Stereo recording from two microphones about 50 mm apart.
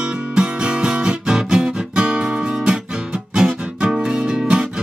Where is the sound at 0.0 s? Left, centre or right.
Centre.